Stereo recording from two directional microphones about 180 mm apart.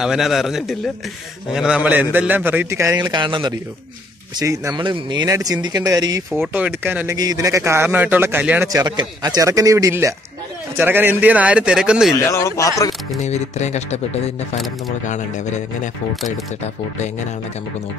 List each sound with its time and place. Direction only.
0.0 s a man's voice: centre (ahead or behind); by 6.2 s 20° right (ahead or behind)
6.3 s a man's voice: 5° right (ahead or behind)
8.7 s a man's voice: 20° right (ahead or behind); by 12.2 s 5° right (ahead or behind)
12.2 s speech: 15° left (ahead or behind)
13.2 s speech: 40° left (ahead or behind)